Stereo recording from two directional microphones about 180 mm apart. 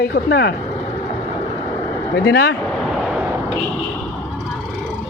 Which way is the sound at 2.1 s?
65° left (ahead or behind).